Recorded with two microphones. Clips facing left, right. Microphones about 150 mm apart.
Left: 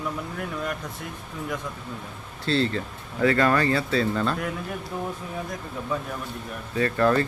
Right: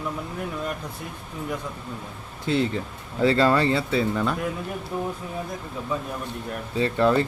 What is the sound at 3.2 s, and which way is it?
A man's voice, 25° right (ahead or behind).